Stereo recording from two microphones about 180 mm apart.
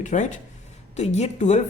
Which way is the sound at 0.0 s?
45° left (ahead or behind).